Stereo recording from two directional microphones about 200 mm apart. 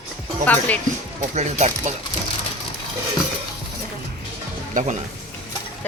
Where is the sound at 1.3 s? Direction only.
35° right (ahead or behind).